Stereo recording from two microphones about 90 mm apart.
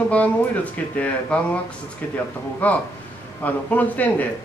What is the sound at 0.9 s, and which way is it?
Speech, 15° left (ahead or behind).